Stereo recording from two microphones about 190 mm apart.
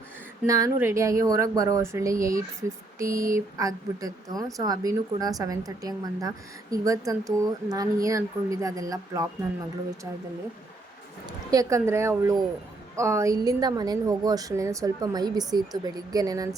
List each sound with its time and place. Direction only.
0.4 s speech: 15° right (ahead or behind)
3.1 s speech: 45° right (ahead or behind)
3.3 s speech: 20° right (ahead or behind)
11.5 s speech: 15° right (ahead or behind)